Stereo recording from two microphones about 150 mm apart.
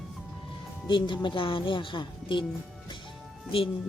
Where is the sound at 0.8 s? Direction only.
30° left (ahead or behind).